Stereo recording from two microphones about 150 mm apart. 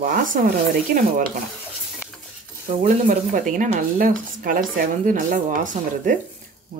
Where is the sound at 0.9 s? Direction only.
90° right.